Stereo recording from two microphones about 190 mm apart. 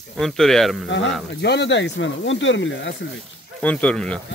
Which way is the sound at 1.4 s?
65° left (ahead or behind).